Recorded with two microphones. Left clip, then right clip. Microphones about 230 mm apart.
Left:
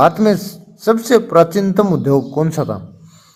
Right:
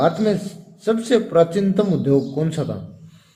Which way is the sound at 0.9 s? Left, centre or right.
Left.